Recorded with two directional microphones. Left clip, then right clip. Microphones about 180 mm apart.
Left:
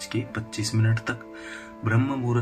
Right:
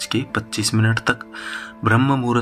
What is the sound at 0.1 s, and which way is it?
Speech, 35° right (ahead or behind).